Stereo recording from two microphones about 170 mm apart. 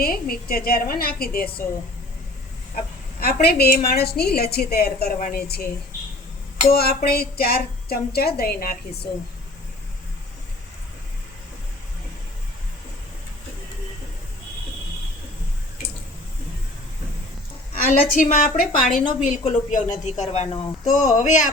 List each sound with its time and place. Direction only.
0.0 s a woman's voice: 60° left (ahead or behind)
3.4 s a woman's voice: 65° left (ahead or behind)
17.8 s speech: 50° left (ahead or behind)